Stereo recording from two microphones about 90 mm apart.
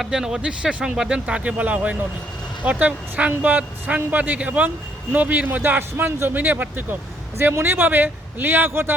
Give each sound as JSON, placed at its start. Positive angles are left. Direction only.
{"t": 0.0, "sound": "a man's voice", "side_deg": -5}